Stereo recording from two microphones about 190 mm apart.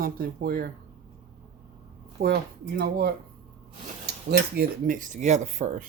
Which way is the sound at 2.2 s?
60° right (ahead or behind).